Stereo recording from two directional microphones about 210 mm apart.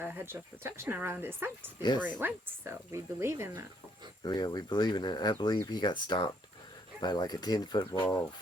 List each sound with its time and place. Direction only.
0.0 s speech: 10° right (ahead or behind)
4.2 s speech: 20° left (ahead or behind)